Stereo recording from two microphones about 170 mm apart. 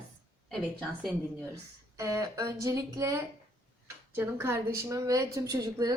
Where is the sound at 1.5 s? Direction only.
15° right (ahead or behind).